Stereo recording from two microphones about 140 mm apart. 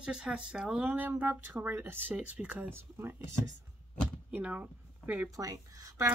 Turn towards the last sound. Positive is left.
turn(degrees=-25)  # may be behind; listen again after turning